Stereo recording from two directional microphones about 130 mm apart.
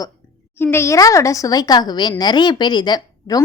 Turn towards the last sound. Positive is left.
turn(degrees=30)  # may be behind; listen again after turning